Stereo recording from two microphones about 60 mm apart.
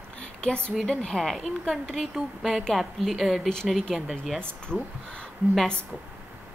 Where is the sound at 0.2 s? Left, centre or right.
Centre.